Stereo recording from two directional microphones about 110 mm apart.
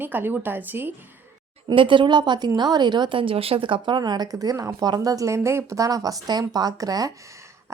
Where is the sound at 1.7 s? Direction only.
50° right (ahead or behind).